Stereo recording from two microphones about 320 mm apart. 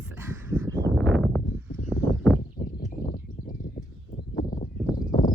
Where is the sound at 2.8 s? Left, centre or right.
Left.